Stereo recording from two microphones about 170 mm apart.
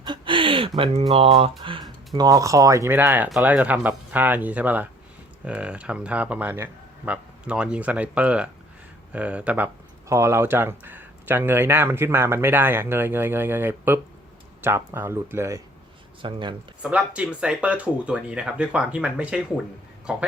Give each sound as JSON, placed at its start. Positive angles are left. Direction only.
{"t": 0.0, "sound": "a sound", "side_deg": -30}
{"t": 0.8, "sound": "speech", "side_deg": -35}
{"t": 16.2, "sound": "speech", "side_deg": -30}
{"t": 16.8, "sound": "speech", "side_deg": -5}